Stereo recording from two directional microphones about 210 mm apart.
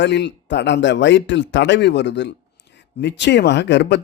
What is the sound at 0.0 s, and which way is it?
Speech, 55° left (ahead or behind).